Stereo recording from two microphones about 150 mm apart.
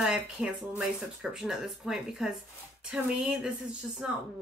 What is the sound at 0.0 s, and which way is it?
Speech, 5° right (ahead or behind).